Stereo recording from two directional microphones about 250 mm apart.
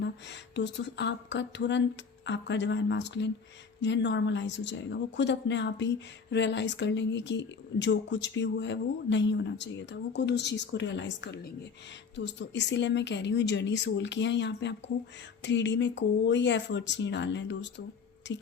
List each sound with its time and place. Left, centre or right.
0.0 s speech: left